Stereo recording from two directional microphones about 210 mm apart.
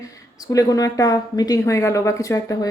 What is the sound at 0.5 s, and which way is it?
A woman's voice, 15° left (ahead or behind).